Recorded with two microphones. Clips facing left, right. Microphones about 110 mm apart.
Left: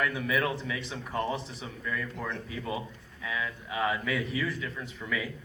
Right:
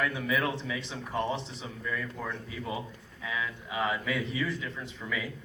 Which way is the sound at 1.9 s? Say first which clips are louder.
Left 1 dB; 15° right (ahead or behind).